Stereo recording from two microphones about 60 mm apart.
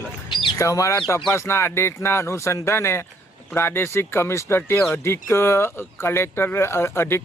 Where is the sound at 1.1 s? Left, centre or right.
Left.